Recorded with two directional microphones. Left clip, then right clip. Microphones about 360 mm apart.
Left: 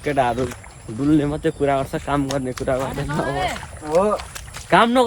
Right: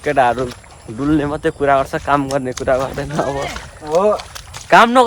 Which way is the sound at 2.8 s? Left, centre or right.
Right.